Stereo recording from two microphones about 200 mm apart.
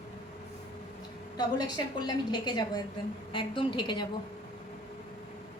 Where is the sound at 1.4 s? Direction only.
20° left (ahead or behind).